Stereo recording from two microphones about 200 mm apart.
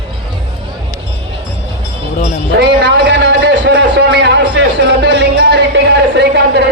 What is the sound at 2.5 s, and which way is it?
A man's voice, 60° right (ahead or behind).